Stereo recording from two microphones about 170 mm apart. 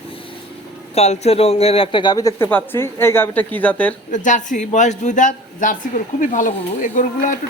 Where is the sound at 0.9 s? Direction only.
40° left (ahead or behind); by 3.9 s 10° left (ahead or behind).